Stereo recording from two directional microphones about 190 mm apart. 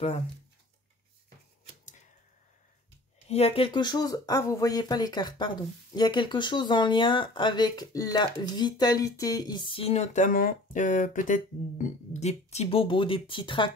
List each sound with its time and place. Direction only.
3.3 s speech: 30° left (ahead or behind)